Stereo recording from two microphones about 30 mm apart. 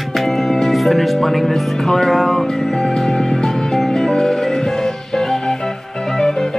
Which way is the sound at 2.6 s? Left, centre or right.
Centre.